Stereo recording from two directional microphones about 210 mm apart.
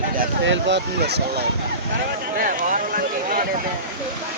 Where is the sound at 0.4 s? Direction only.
60° right (ahead or behind).